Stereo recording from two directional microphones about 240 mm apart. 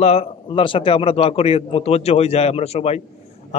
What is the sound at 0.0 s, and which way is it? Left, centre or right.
A man's voice, left.